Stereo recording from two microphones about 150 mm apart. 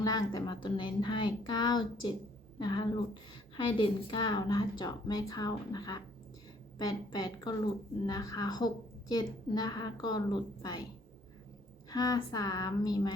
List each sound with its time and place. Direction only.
0.0 s a woman's voice: 25° left (ahead or behind)
11.9 s a woman's voice: 25° left (ahead or behind)